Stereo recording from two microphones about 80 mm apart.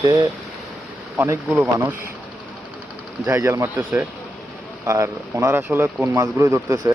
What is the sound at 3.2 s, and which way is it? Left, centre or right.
Speech, right.